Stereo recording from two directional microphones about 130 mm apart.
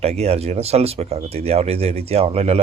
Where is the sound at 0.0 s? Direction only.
55° right (ahead or behind).